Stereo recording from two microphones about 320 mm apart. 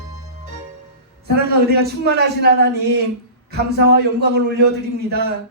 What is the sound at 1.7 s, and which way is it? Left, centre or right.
Speech, right.